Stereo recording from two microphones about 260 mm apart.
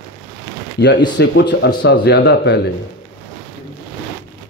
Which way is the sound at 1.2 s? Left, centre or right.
Left.